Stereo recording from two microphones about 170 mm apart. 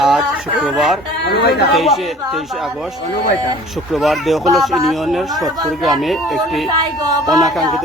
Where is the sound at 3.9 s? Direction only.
Centre (ahead or behind).